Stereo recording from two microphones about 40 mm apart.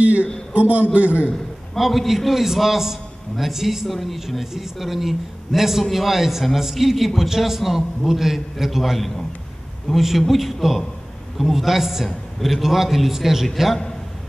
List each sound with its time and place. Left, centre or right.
0.5 s a sound: right
0.9 s a man's voice: right
1.8 s a man's voice: centre